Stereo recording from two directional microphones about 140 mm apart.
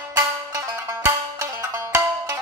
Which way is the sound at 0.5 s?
20° right (ahead or behind).